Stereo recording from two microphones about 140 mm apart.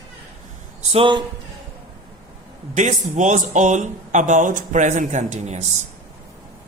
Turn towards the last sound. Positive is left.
turn(degrees=-55)  # may be behind; listen again after turning